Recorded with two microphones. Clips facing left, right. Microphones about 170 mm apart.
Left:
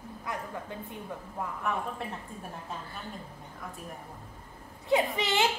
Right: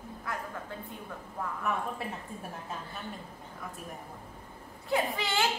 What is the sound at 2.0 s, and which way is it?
Speech, 5° right (ahead or behind).